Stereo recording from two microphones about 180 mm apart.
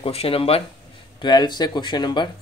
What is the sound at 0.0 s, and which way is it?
Speech, 30° left (ahead or behind).